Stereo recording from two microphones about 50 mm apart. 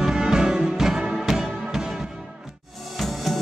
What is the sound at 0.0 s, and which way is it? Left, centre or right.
Music, centre.